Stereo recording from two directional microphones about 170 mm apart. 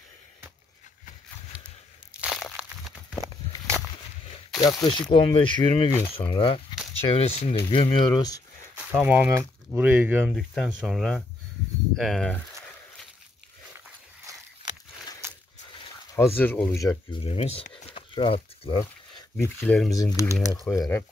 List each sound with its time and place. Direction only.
1.5 s a sound: 5° right (ahead or behind)
2.1 s crushing: 5° right (ahead or behind)
3.2 s a sound: 15° right (ahead or behind)
4.6 s speech: 25° left (ahead or behind)
5.9 s speech: 15° left (ahead or behind)
6.1 s speech: 30° left (ahead or behind)
8.7 s speech: 10° right (ahead or behind)
10.3 s speech: centre (ahead or behind)
15.2 s a sound: 15° right (ahead or behind)
16.2 s speech: 10° left (ahead or behind)
17.2 s speech: 35° left (ahead or behind)
17.6 s crumpling: 45° left (ahead or behind)
17.9 s a sound: 30° left (ahead or behind)
19.3 s speech: 10° left (ahead or behind)